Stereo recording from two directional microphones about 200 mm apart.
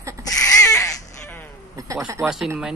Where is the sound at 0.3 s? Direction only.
15° left (ahead or behind).